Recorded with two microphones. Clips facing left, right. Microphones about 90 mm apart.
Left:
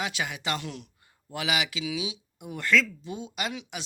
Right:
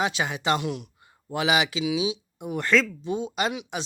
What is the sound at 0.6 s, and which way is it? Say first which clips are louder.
Speech: right 8 dB; 15° right (ahead or behind).